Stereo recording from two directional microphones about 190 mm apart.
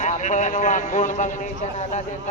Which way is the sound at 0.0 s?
40° left (ahead or behind).